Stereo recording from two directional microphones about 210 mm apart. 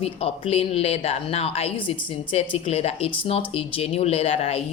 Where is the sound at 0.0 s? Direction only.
30° left (ahead or behind).